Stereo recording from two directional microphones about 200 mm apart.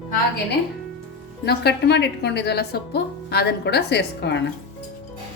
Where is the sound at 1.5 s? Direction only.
55° left (ahead or behind).